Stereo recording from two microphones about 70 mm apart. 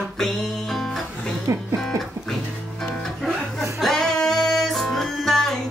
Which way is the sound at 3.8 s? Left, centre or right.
Centre.